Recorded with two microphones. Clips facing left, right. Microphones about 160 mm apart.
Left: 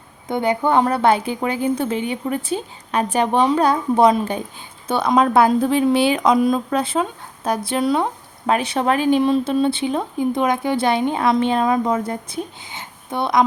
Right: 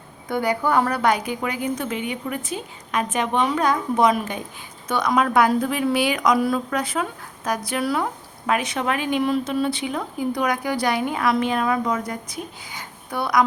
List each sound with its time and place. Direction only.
0.3 s speech: 25° left (ahead or behind)